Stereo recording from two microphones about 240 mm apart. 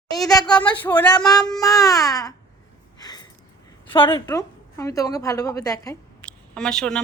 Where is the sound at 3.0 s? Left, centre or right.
Centre.